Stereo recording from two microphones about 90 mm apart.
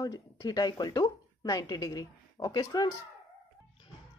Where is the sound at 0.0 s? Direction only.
45° left (ahead or behind).